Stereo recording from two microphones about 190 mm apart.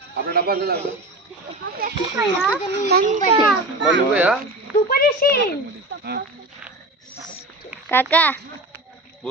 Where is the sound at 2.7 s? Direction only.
60° right (ahead or behind).